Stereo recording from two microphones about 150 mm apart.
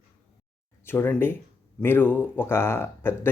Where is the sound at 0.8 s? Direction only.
15° left (ahead or behind).